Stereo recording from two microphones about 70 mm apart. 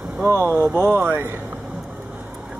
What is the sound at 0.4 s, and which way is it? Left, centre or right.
Speech, right.